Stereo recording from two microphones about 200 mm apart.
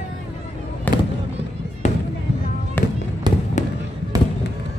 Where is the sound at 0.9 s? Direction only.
10° left (ahead or behind).